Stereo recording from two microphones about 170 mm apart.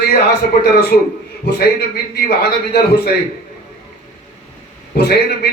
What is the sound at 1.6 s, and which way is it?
A man's voice, 70° left (ahead or behind).